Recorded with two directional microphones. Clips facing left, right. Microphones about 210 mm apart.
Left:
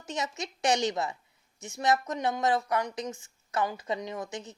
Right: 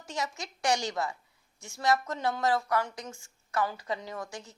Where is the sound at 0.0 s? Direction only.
20° left (ahead or behind).